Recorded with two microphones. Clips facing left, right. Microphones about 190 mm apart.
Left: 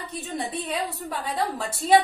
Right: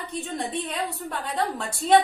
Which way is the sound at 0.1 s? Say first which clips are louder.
Right 1 dB; centre (ahead or behind).